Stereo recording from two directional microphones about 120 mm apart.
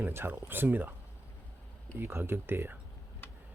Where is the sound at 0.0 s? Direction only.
20° right (ahead or behind).